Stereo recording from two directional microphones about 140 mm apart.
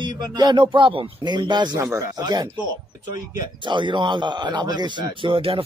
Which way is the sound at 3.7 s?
35° right (ahead or behind).